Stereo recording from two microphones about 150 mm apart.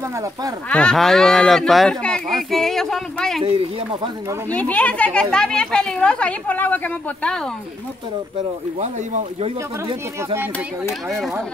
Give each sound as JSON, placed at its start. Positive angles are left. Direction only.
{"t": 0.7, "sound": "speech", "side_deg": 5}
{"t": 3.4, "sound": "speech", "side_deg": -35}
{"t": 4.5, "sound": "speech", "side_deg": 10}
{"t": 8.7, "sound": "speech", "side_deg": -50}
{"t": 11.1, "sound": "speech", "side_deg": 0}